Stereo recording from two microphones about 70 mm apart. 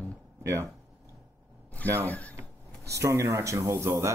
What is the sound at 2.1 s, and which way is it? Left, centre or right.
Speech, left.